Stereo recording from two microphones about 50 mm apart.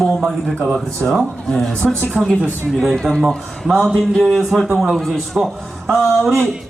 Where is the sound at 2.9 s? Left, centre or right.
Centre.